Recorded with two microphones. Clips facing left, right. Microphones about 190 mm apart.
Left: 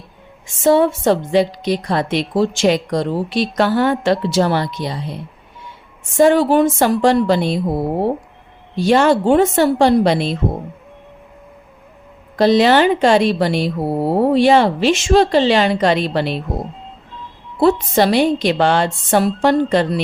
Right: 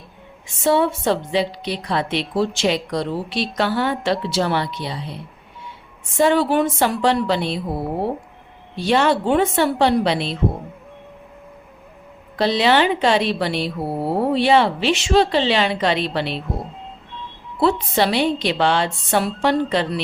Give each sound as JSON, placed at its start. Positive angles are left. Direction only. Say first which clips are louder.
{"t": 0.4, "sound": "a woman's voice", "louder": "left 5 dB", "side_deg": 45}
{"t": 6.1, "sound": "a woman's voice", "louder": "left 5 dB", "side_deg": 45}
{"t": 8.7, "sound": "a woman's voice", "louder": "left 5 dB", "side_deg": 45}
{"t": 12.4, "sound": "a woman's voice", "louder": "left 5 dB", "side_deg": 45}
{"t": 17.6, "sound": "a woman's voice", "louder": "left 5 dB", "side_deg": 45}